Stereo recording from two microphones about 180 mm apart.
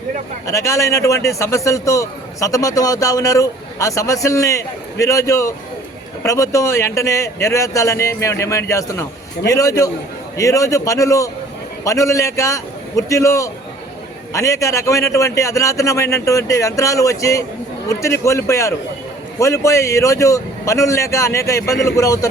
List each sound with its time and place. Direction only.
0.4 s a man's voice: 15° left (ahead or behind)